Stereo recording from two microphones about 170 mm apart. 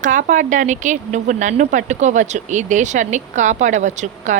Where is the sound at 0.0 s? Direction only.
50° right (ahead or behind).